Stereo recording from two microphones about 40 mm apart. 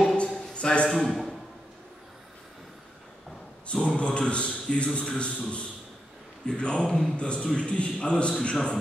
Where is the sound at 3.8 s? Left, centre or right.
Left.